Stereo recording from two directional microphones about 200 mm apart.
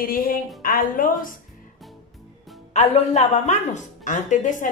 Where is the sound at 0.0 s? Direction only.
45° left (ahead or behind).